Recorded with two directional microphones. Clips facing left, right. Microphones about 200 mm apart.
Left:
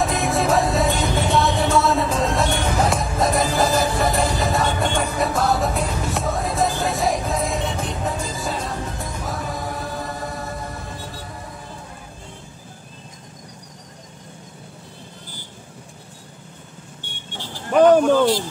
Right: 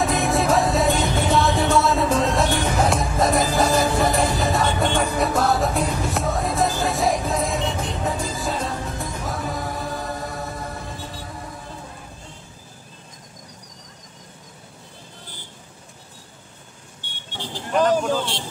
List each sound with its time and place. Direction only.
0.0 s music: centre (ahead or behind)
17.7 s vehicle: 60° left (ahead or behind)